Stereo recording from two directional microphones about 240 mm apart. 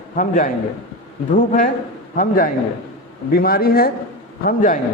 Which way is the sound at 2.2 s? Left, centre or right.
Left.